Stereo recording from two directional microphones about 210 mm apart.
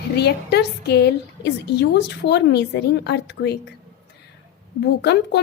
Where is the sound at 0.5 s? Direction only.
50° left (ahead or behind).